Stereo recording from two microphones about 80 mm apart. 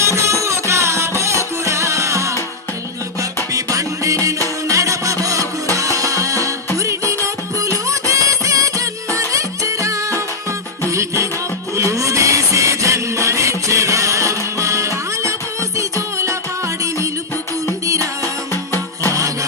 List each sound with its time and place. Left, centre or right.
0.0 s music: right
4.7 s a sound: right
5.7 s music: right
17.8 s music: right
18.2 s music: left
19.1 s music: right